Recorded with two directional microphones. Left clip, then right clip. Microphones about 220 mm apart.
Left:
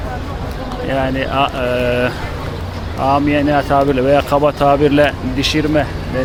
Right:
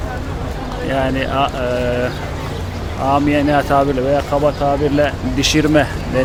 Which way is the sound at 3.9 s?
15° left (ahead or behind).